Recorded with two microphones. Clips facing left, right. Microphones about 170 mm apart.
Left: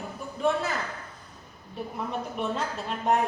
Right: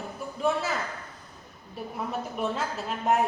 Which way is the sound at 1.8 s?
Centre (ahead or behind).